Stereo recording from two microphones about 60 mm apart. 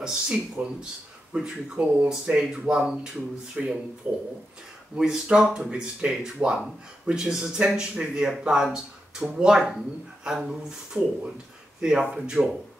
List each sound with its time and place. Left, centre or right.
0.0 s speech: centre